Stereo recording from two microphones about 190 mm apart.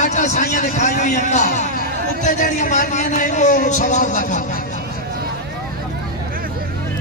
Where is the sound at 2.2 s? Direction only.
40° left (ahead or behind).